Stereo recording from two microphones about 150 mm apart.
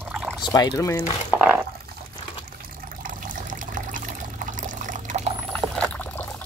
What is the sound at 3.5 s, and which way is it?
Water, 60° right (ahead or behind).